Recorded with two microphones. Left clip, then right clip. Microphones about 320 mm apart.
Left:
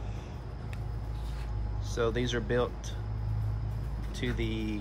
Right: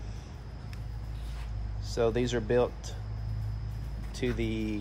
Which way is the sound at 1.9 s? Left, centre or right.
Centre.